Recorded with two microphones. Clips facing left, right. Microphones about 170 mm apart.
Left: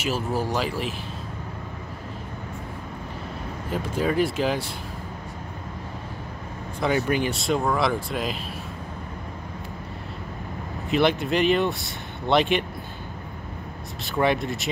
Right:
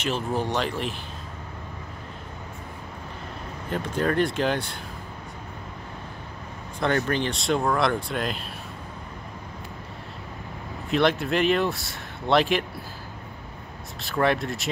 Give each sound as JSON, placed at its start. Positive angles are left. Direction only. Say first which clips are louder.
{"t": 0.0, "sound": "speech", "louder": "left 1 dB", "side_deg": 5}
{"t": 3.7, "sound": "speech", "louder": "even", "side_deg": 5}
{"t": 6.8, "sound": "speech", "louder": "left 1 dB", "side_deg": 10}
{"t": 10.9, "sound": "speech", "louder": "left 1 dB", "side_deg": 0}
{"t": 14.0, "sound": "speech", "louder": "left 1 dB", "side_deg": 0}